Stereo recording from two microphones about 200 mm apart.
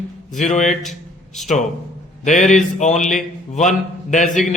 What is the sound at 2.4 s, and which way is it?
Speech, centre (ahead or behind).